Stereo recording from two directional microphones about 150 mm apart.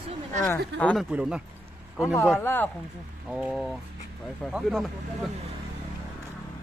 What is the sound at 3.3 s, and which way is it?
Speech, 5° right (ahead or behind).